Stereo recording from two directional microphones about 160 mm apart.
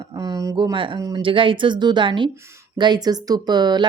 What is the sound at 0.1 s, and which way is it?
Speech, 25° right (ahead or behind).